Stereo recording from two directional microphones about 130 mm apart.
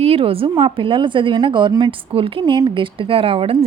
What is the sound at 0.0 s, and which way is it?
A woman's voice, 45° right (ahead or behind).